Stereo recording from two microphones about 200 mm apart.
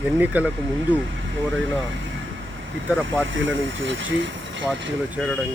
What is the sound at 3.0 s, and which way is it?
Speech, 70° right (ahead or behind).